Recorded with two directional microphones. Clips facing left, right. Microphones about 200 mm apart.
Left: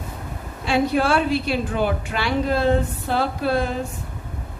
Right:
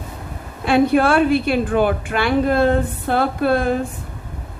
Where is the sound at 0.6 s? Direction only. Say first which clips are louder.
Right 5 dB; 55° right (ahead or behind).